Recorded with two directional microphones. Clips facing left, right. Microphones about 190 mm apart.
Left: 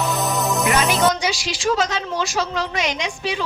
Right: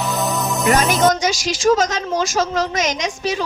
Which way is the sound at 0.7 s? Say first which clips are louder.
Right 5 dB; 45° right (ahead or behind).